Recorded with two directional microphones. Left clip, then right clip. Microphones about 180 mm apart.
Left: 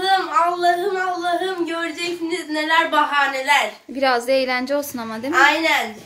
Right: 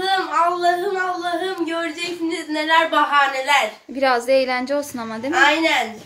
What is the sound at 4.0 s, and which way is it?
A woman's voice, 5° left (ahead or behind).